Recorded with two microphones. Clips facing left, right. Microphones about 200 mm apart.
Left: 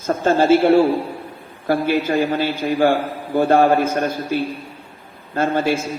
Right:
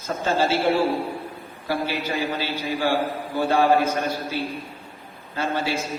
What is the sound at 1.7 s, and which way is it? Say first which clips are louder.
A man's voice: left 8 dB; 50° left (ahead or behind).